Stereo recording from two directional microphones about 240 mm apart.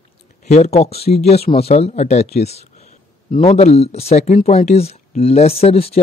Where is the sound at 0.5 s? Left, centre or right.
Left.